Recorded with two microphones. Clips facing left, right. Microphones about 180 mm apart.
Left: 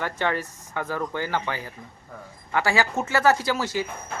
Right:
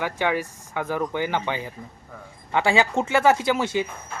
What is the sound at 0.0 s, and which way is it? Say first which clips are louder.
Speech: right 2 dB; 10° right (ahead or behind).